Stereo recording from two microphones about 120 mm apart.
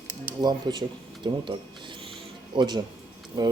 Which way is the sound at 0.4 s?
35° right (ahead or behind).